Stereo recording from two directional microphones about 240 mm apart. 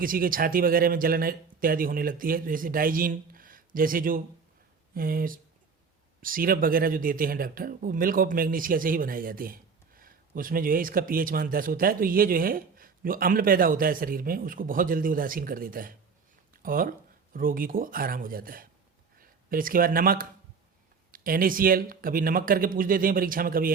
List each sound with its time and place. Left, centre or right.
0.0 s speech: right